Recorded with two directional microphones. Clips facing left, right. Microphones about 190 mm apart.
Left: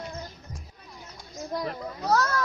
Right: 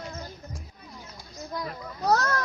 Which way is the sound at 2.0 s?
40° right (ahead or behind).